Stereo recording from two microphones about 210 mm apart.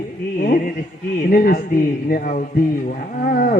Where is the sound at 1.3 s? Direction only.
40° left (ahead or behind).